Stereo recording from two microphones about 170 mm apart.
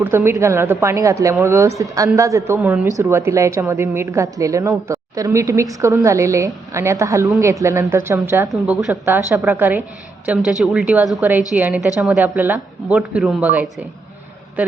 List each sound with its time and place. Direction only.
0.0 s a woman's voice: 15° right (ahead or behind)